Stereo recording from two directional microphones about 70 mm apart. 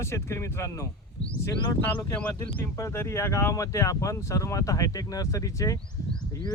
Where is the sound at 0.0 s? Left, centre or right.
Left.